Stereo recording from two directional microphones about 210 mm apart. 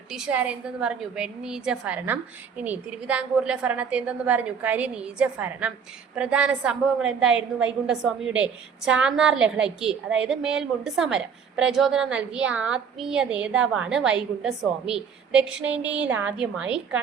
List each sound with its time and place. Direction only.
0.1 s a woman's voice: 5° right (ahead or behind)